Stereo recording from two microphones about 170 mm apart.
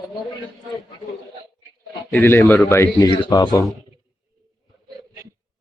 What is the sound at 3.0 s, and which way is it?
Speech, 25° left (ahead or behind).